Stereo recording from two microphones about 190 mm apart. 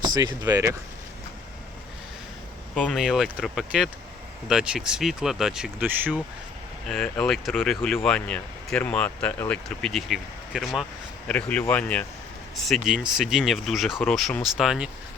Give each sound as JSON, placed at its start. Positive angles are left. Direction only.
{"t": 0.0, "sound": "speech", "side_deg": -20}
{"t": 2.7, "sound": "speech", "side_deg": 5}
{"t": 6.8, "sound": "speech", "side_deg": 5}